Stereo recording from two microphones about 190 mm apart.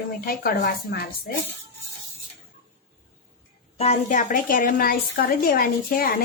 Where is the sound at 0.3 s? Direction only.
50° left (ahead or behind).